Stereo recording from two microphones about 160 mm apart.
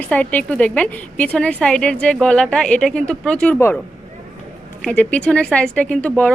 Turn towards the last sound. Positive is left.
turn(degrees=5)  # may be behind; listen again after turning